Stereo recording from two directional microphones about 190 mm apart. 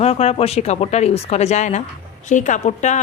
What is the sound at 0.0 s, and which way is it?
Speech, 35° left (ahead or behind).